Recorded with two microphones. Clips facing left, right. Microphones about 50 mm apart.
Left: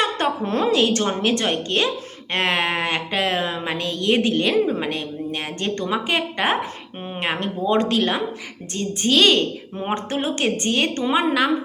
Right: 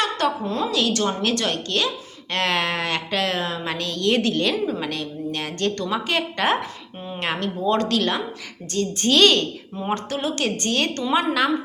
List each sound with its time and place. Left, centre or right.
0.4 s a woman's voice: left
0.7 s speech: left
9.0 s speech: centre
9.9 s speech: left; by 11.5 s centre